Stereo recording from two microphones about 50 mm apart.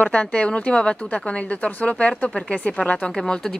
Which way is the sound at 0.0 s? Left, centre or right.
Left.